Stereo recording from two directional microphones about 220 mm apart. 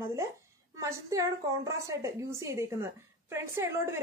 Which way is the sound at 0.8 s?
15° right (ahead or behind).